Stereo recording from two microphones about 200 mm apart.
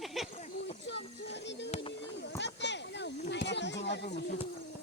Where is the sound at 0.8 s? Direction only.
60° left (ahead or behind).